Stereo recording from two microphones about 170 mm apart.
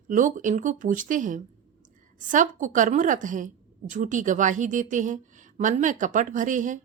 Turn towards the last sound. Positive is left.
turn(degrees=-50)  # may be behind; listen again after turning